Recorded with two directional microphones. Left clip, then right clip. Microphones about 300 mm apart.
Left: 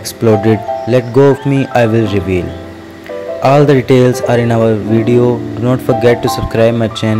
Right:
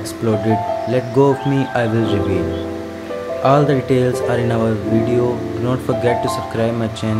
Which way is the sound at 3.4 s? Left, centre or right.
Left.